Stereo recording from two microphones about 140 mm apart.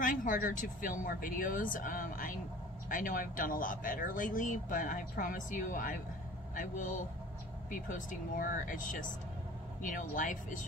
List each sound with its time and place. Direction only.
0.0 s speech: 75° left (ahead or behind)